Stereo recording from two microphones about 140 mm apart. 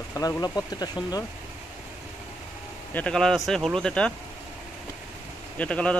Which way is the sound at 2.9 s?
5° left (ahead or behind).